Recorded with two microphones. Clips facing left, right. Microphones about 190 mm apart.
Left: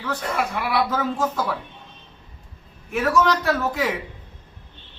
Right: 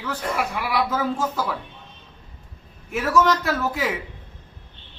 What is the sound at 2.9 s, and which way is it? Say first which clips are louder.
Speech: even; 5° right (ahead or behind).